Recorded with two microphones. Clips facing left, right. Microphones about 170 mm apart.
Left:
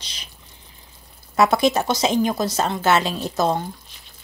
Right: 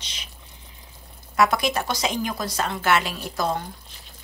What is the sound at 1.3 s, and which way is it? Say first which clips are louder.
A woman's voice: left 4 dB; 25° left (ahead or behind).